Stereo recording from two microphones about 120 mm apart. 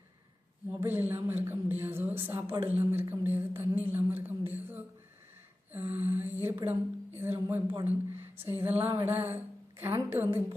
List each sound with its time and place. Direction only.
0.7 s a woman's voice: 15° right (ahead or behind)
5.9 s a woman's voice: 15° right (ahead or behind)
7.9 s a sound: 20° right (ahead or behind)